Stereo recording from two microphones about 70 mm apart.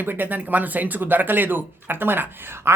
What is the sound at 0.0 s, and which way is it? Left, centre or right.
Speech, right.